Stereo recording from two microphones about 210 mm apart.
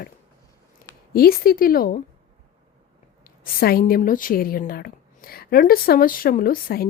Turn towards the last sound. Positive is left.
turn(degrees=45)  # may be behind; listen again after turning